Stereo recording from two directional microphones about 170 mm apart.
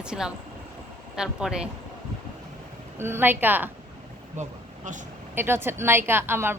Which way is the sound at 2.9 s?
15° right (ahead or behind).